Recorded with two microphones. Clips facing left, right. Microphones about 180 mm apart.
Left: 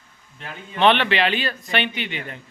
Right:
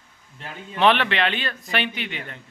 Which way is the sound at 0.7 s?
Centre (ahead or behind).